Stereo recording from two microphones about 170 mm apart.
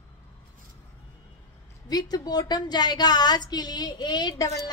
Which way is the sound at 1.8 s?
25° left (ahead or behind).